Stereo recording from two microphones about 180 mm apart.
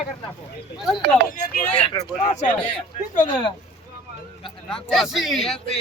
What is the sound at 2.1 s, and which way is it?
Speech, 45° left (ahead or behind).